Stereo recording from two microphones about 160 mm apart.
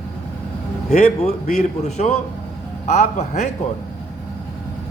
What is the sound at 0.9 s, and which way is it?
A man's voice, 45° left (ahead or behind).